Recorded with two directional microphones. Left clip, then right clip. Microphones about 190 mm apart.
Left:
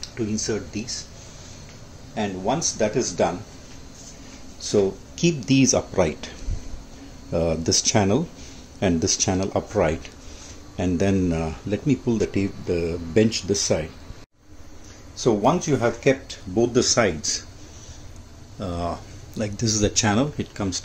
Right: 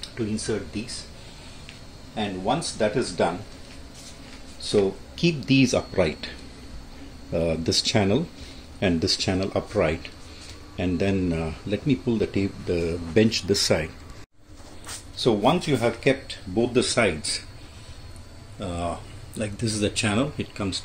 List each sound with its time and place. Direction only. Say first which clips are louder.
0.0 s speech: left 2 dB; 10° left (ahead or behind)
2.1 s speech: left 1 dB; 15° left (ahead or behind)
4.6 s speech: left 1 dB; 10° left (ahead or behind)
7.3 s speech: left 2 dB; 10° left (ahead or behind)
15.1 s speech: left 1 dB; 15° left (ahead or behind)
18.6 s speech: left 1 dB; 20° left (ahead or behind)